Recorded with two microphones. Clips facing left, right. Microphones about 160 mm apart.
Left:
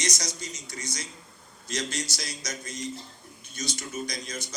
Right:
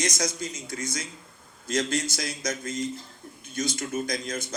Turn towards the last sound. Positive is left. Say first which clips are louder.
# right 5 dB
turn(degrees=-50)  # may be behind; listen again after turning